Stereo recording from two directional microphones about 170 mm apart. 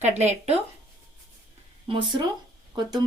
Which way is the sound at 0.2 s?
40° right (ahead or behind).